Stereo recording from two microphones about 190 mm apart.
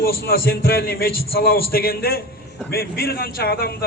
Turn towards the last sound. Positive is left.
turn(degrees=55)  # may be behind; listen again after turning